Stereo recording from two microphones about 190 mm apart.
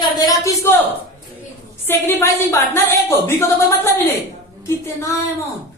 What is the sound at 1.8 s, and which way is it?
Speech, 10° left (ahead or behind).